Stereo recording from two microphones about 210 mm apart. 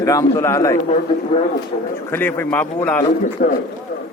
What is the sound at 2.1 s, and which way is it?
Speech, 10° left (ahead or behind).